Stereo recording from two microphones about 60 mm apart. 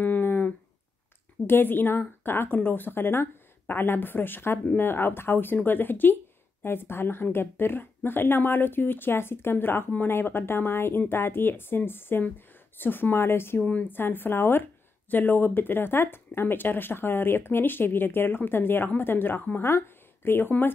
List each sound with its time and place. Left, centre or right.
0.0 s a sound: left
1.5 s speech: left
13.6 s a woman's voice: left
13.9 s speech: left